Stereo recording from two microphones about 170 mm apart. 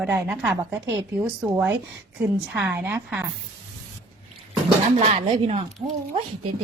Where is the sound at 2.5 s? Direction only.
10° right (ahead or behind).